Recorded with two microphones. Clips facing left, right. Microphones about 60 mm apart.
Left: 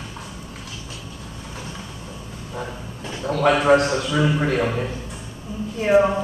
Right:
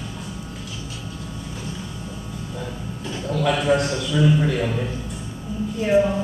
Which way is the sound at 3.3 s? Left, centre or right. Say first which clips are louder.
Left 4 dB; left.